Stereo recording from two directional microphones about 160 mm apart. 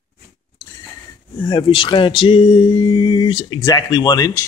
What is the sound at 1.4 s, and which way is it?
Speech, 30° left (ahead or behind).